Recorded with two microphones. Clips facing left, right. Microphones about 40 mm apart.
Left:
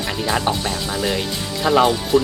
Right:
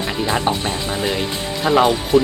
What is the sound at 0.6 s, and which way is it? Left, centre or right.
Speech, right.